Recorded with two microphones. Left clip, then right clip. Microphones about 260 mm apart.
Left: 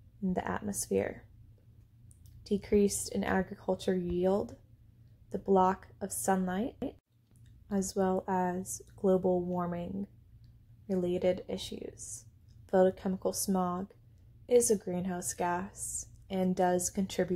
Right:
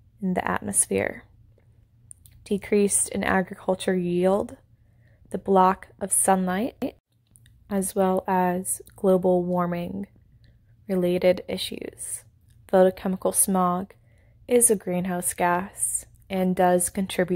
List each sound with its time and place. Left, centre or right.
0.2 s a woman's voice: right
2.4 s a woman's voice: right